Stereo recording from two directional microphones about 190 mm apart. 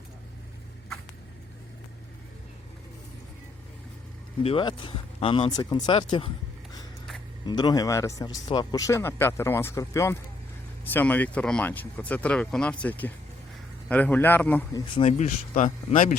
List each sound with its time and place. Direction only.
4.4 s speech: 25° left (ahead or behind)
7.4 s speech: 20° left (ahead or behind)
14.9 s speech: 35° left (ahead or behind)